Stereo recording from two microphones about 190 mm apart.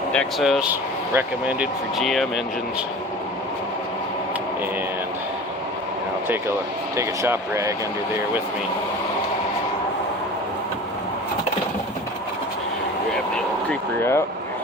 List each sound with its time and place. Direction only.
0.1 s speech: centre (ahead or behind)
6.9 s speech: 15° right (ahead or behind)
13.7 s speech: 10° left (ahead or behind)